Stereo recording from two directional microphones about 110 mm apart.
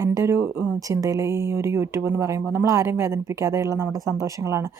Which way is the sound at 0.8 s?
30° right (ahead or behind).